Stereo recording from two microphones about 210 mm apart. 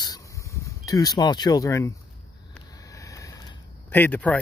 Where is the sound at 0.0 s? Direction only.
15° left (ahead or behind).